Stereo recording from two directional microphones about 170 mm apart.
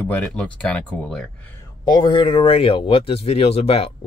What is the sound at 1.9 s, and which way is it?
Speech, 25° left (ahead or behind).